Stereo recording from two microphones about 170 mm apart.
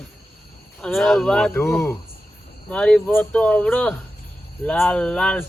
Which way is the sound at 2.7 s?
5° left (ahead or behind).